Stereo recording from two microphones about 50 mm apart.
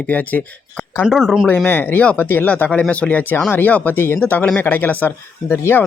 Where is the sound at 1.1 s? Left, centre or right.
Centre.